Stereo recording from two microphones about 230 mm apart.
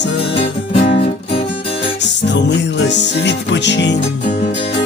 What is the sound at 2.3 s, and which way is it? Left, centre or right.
Music, left.